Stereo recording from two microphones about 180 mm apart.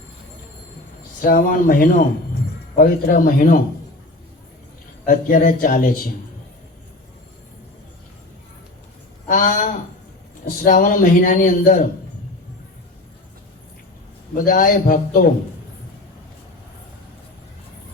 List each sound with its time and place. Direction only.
1.2 s speech: 50° left (ahead or behind)
5.0 s speech: 45° left (ahead or behind)
9.2 s speech: 45° left (ahead or behind)
14.3 s speech: 50° left (ahead or behind)